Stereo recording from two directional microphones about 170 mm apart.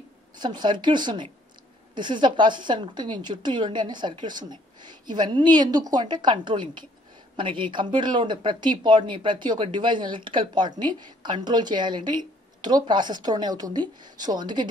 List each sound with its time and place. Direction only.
0.4 s speech: 25° right (ahead or behind)